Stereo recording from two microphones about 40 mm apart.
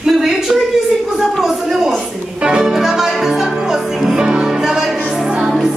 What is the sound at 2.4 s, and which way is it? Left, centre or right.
Music, centre.